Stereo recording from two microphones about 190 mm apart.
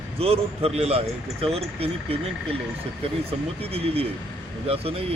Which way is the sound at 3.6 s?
30° right (ahead or behind).